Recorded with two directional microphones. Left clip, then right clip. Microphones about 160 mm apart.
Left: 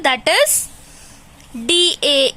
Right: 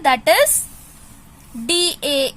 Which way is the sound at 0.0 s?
25° left (ahead or behind).